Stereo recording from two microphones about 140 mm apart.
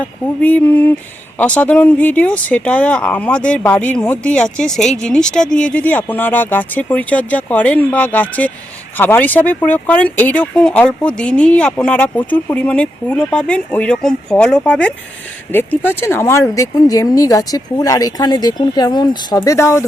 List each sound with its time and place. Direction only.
0.0 s speech: 10° left (ahead or behind); by 19.4 s 30° left (ahead or behind)
19.4 s speech: 20° left (ahead or behind)